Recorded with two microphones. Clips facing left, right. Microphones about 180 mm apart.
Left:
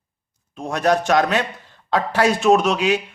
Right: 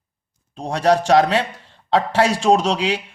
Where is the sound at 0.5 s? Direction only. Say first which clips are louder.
Right 2 dB; 30° right (ahead or behind).